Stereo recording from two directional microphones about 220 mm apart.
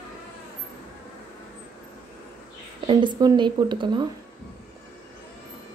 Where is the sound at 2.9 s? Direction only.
20° right (ahead or behind).